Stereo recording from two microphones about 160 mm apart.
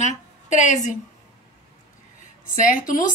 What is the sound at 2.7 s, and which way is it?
Speech, 60° left (ahead or behind).